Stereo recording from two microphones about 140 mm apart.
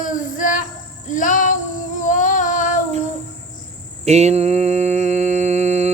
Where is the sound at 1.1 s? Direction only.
65° left (ahead or behind).